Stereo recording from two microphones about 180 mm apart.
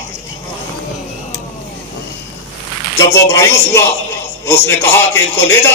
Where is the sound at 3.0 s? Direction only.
15° left (ahead or behind).